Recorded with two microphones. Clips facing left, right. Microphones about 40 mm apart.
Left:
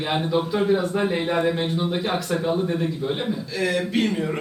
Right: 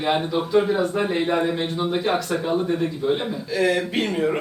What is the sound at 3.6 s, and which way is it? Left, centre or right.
Speech, centre.